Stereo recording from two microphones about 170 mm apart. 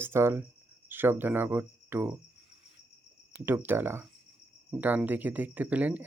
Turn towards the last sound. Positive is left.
turn(degrees=-10)  # may be behind; listen again after turning